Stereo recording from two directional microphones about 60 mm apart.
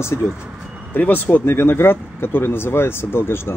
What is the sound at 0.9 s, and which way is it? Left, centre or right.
Speech, left.